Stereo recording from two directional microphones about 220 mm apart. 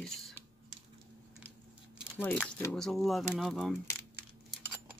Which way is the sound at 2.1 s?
5° left (ahead or behind).